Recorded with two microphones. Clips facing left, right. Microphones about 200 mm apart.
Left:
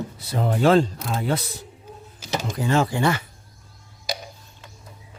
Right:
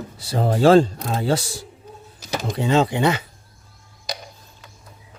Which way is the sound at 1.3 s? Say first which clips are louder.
Right 3 dB; 90° right.